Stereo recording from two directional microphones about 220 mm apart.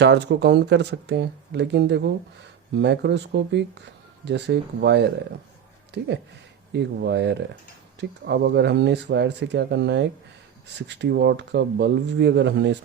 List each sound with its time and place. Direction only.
0.0 s speech: 50° right (ahead or behind)
6.7 s speech: 50° right (ahead or behind)